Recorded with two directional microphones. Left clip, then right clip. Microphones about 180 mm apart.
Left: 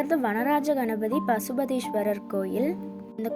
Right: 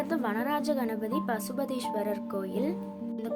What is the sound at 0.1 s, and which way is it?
Speech, 20° left (ahead or behind).